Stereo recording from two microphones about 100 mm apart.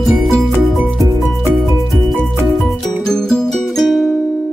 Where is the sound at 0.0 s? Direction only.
Centre (ahead or behind).